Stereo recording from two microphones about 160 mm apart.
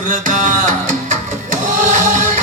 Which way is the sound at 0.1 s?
55° right (ahead or behind).